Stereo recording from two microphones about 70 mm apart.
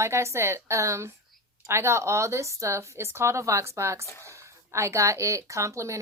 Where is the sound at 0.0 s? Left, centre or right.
Right.